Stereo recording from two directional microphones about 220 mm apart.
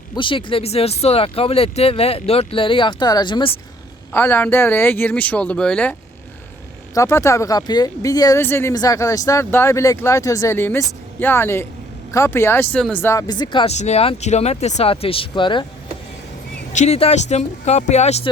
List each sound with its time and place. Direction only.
0.2 s speech: 20° left (ahead or behind)
4.1 s speech: 10° left (ahead or behind)
16.7 s speech: 30° left (ahead or behind)